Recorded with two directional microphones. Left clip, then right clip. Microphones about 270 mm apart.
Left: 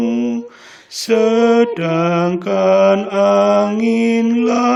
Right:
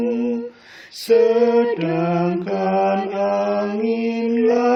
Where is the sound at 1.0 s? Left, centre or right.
Left.